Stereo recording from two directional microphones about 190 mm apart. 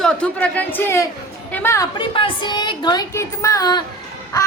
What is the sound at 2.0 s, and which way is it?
A woman's voice, 25° left (ahead or behind).